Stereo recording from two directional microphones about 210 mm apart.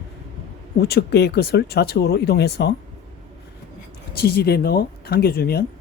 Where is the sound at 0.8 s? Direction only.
50° left (ahead or behind).